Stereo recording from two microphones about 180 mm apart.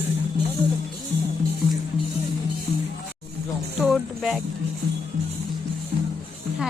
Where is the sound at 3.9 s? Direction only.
Centre (ahead or behind).